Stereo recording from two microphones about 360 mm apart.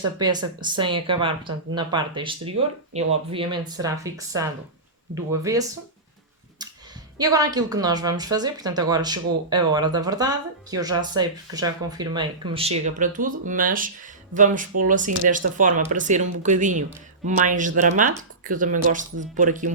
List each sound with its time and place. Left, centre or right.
0.0 s a woman's voice: centre
7.2 s a woman's voice: centre